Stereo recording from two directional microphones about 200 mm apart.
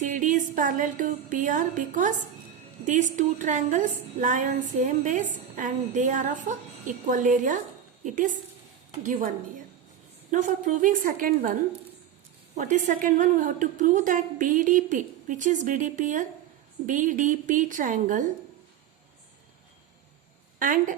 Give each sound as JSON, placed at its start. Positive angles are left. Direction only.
{"t": 0.0, "sound": "a woman's voice", "side_deg": -40}
{"t": 10.3, "sound": "a woman's voice", "side_deg": -40}
{"t": 12.5, "sound": "a woman's voice", "side_deg": -40}
{"t": 20.6, "sound": "a woman's voice", "side_deg": -45}